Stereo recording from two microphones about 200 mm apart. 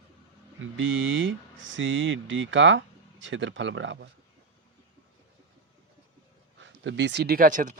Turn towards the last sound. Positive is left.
turn(degrees=-40)  # may be behind; listen again after turning